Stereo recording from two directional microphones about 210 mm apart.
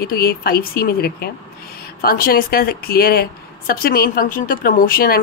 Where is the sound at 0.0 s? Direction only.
45° left (ahead or behind).